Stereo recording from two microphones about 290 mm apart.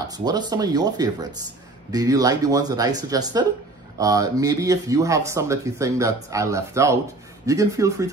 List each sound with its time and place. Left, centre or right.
0.1 s speech: centre